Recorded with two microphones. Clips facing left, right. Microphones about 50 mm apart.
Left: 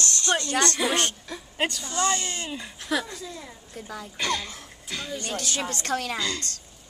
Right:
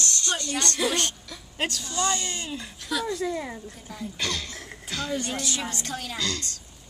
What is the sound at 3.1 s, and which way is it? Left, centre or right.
Speech, right.